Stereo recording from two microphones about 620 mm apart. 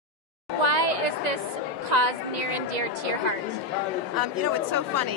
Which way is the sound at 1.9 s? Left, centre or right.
Right.